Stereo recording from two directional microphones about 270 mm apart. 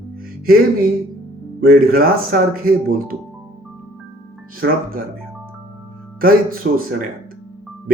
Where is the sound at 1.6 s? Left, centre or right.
Right.